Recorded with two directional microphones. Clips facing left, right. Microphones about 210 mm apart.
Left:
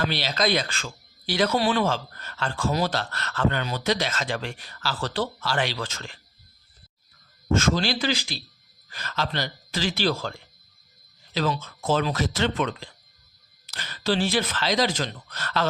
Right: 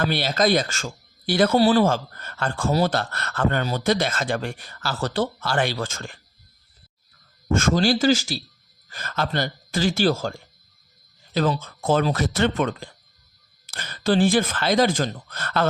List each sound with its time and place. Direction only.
0.1 s speech: 50° right (ahead or behind)
1.5 s speech: 35° right (ahead or behind)
7.5 s speech: 50° right (ahead or behind)
11.3 s speech: 45° right (ahead or behind)